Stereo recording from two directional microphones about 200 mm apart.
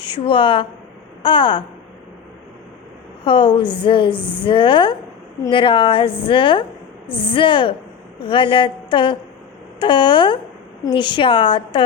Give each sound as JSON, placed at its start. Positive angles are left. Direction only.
{"t": 0.0, "sound": "a woman's voice", "side_deg": 25}
{"t": 3.2, "sound": "a woman's voice", "side_deg": 25}